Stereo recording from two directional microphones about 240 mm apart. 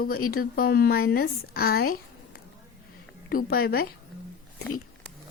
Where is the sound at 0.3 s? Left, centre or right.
Left.